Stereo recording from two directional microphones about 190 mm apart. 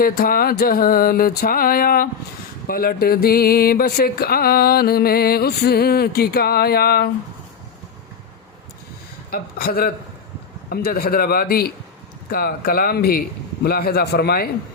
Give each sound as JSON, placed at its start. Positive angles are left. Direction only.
{"t": 0.0, "sound": "speech", "side_deg": 50}
{"t": 9.3, "sound": "speech", "side_deg": 50}